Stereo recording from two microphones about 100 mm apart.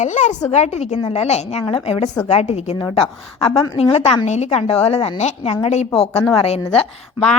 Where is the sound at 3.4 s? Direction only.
40° left (ahead or behind).